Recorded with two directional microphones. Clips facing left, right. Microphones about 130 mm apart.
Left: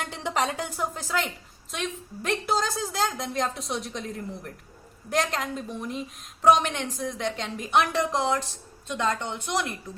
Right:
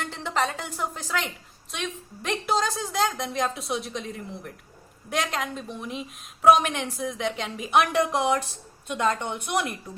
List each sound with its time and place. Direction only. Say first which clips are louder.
0.1 s music: even; 15° left (ahead or behind)
0.8 s a woman's voice: right 1 dB; 5° left (ahead or behind)
5.0 s a woman's voice: left 1 dB; centre (ahead or behind)